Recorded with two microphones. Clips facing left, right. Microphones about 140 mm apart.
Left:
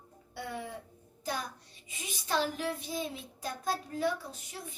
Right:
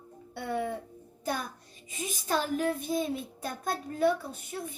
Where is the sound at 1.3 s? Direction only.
55° right (ahead or behind).